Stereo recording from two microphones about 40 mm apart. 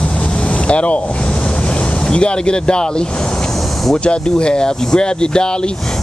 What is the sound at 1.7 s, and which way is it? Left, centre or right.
Speech, left.